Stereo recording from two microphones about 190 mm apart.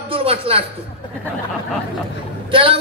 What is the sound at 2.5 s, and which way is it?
Speech, 25° right (ahead or behind).